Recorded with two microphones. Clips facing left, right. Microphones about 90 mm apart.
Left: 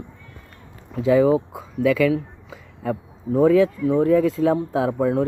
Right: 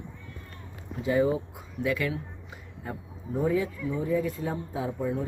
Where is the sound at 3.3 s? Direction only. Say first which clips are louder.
Left 11 dB; 90° left.